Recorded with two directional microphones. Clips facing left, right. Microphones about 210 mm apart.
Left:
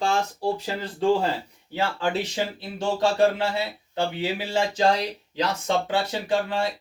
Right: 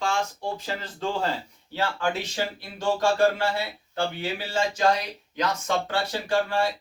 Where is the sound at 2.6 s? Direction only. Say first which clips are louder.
Left 1 dB; 20° left (ahead or behind).